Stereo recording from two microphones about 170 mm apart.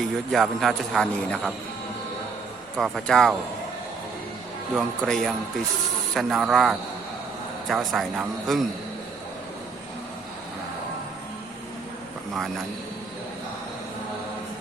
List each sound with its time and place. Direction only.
0.3 s a man's voice: centre (ahead or behind)
2.7 s a man's voice: centre (ahead or behind)
4.8 s a man's voice: centre (ahead or behind)